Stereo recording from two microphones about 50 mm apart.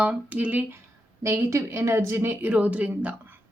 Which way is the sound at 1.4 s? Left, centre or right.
Right.